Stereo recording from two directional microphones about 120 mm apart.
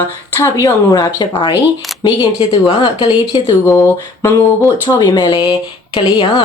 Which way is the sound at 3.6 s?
20° left (ahead or behind).